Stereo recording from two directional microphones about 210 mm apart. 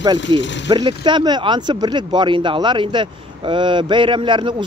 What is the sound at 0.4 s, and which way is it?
Speech, 60° left (ahead or behind).